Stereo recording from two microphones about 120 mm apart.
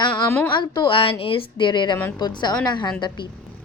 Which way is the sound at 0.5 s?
35° left (ahead or behind).